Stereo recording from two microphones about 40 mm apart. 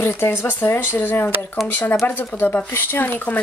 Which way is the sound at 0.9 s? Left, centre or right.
Left.